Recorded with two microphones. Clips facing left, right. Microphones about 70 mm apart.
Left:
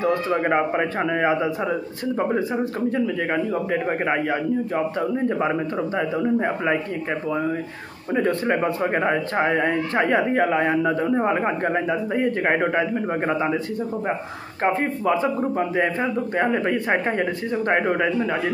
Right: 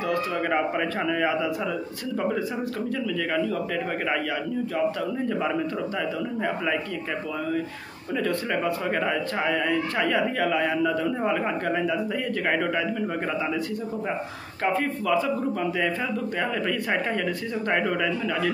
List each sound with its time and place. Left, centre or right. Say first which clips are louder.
0.0 s a man's voice: left 5 dB; left
8.1 s speech: left 5 dB; left
14.6 s speech: left 4 dB; left